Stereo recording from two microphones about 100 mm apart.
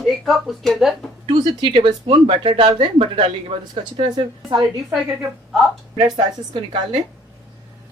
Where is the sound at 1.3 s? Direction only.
60° right (ahead or behind).